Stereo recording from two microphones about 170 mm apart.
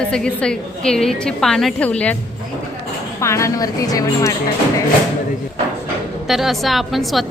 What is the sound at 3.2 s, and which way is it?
A woman's voice, 15° left (ahead or behind).